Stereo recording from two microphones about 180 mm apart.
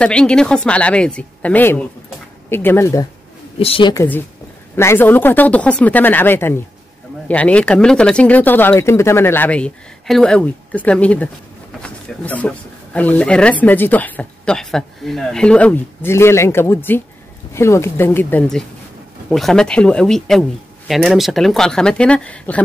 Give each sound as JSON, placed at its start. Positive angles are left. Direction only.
{"t": 0.0, "sound": "speech", "side_deg": 5}
{"t": 3.5, "sound": "a woman's voice", "side_deg": 30}
{"t": 3.9, "sound": "speech", "side_deg": 15}